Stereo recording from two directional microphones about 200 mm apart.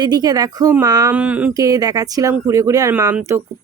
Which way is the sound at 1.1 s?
5° right (ahead or behind).